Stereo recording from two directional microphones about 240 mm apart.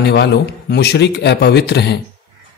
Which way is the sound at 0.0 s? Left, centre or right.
Left.